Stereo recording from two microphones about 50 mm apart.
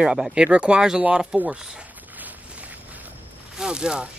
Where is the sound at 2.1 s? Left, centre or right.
Right.